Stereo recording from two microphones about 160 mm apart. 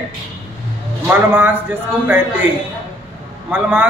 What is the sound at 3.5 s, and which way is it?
Speech, 5° right (ahead or behind).